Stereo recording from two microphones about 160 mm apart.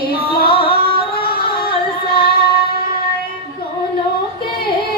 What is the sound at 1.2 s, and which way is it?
Music, 70° left (ahead or behind).